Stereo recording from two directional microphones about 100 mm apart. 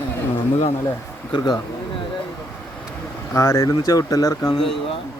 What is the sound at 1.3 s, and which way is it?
Speech, 50° left (ahead or behind).